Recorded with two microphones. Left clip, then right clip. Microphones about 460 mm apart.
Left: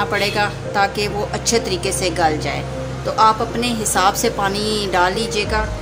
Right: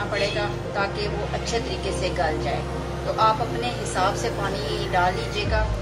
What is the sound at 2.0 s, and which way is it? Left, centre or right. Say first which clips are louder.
Music: left 7 dB; right.